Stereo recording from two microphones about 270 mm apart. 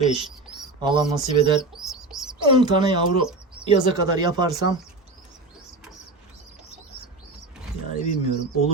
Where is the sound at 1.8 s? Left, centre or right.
Centre.